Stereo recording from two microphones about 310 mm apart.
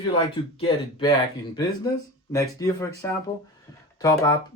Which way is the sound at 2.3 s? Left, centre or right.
Centre.